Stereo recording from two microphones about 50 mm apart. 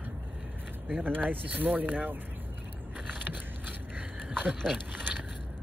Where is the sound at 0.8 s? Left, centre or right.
Right.